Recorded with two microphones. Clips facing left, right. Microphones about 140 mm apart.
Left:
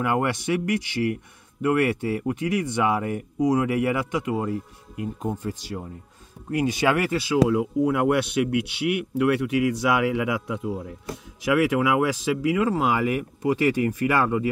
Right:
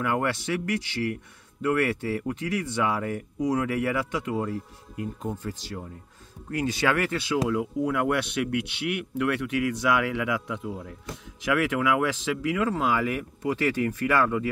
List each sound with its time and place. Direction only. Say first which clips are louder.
0.0 s speech: left 3 dB; 20° left (ahead or behind)